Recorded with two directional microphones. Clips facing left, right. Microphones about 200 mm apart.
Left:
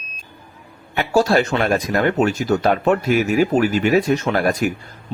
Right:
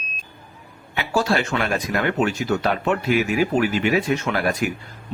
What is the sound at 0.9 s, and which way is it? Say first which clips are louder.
Speech: left 5 dB; 40° left (ahead or behind).